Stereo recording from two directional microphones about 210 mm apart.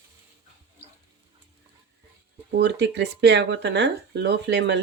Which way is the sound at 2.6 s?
55° right (ahead or behind).